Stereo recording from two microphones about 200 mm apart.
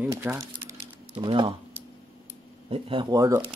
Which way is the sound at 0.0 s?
10° right (ahead or behind).